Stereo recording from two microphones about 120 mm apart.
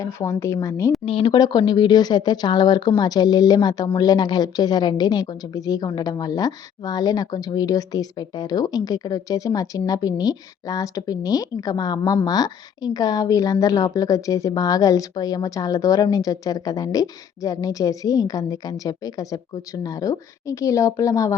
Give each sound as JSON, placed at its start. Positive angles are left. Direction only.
{"t": 0.0, "sound": "a woman's voice", "side_deg": 25}
{"t": 1.0, "sound": "speech", "side_deg": 45}